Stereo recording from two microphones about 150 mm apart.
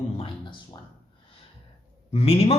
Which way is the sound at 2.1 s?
45° left (ahead or behind).